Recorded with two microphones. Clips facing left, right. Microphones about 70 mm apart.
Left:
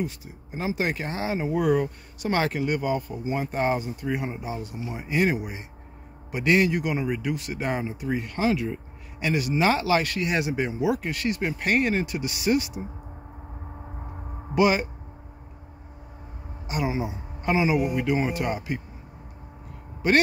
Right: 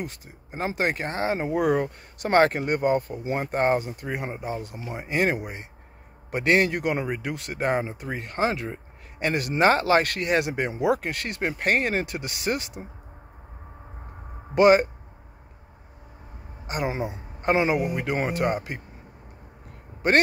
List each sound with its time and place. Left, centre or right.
0.0 s speech: right
9.3 s speech: right
14.5 s speech: right
16.6 s a man's voice: right
18.1 s speech: right
18.4 s speech: right